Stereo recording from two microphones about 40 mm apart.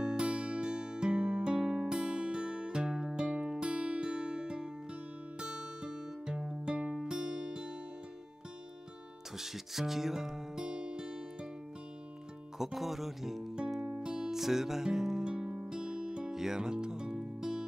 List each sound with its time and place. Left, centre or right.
0.2 s music: right
9.4 s speech: centre
10.7 s music: right
12.5 s speech: centre
13.9 s music: centre